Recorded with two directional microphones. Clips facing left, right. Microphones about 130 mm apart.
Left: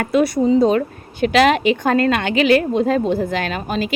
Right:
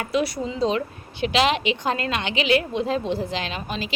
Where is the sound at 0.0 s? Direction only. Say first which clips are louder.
Left 8 dB; 50° left (ahead or behind).